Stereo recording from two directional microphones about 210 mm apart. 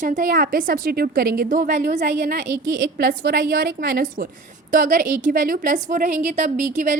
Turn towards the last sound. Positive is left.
turn(degrees=-40)  # may be behind; listen again after turning